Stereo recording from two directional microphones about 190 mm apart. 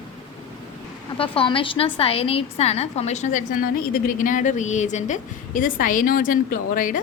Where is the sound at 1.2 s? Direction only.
30° left (ahead or behind).